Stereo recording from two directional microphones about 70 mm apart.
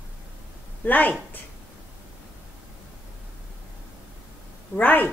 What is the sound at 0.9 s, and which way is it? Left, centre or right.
Speech, left.